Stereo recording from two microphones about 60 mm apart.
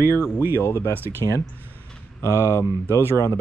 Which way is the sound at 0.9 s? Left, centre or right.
Right.